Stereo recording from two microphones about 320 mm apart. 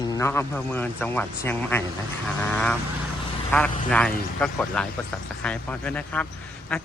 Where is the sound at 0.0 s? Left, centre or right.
Centre.